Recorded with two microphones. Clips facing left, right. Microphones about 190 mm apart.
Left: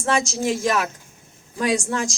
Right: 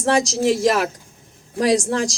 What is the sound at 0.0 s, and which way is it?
A woman's voice, 35° right (ahead or behind).